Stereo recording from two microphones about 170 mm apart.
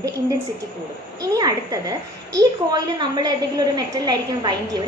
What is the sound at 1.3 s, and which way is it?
A woman's voice, 20° right (ahead or behind).